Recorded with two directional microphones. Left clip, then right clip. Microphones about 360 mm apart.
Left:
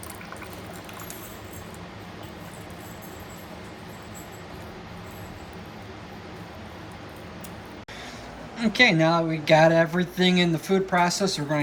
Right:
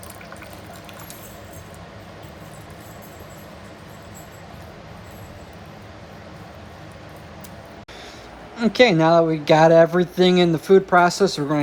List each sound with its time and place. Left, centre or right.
8.5 s speech: centre